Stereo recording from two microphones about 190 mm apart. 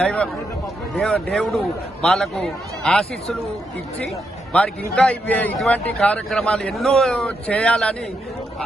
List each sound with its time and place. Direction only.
0.0 s a man's voice: 5° left (ahead or behind)
4.5 s a man's voice: 5° left (ahead or behind)